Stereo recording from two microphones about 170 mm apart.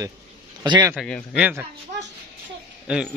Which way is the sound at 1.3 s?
10° right (ahead or behind).